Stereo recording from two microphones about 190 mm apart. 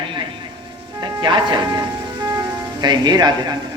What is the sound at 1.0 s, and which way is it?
Speech, 25° right (ahead or behind).